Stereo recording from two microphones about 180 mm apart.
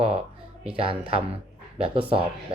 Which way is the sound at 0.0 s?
30° right (ahead or behind).